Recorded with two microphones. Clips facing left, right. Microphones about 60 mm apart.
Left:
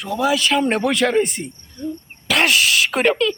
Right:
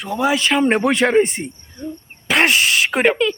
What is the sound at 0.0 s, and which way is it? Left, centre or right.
Speech, right.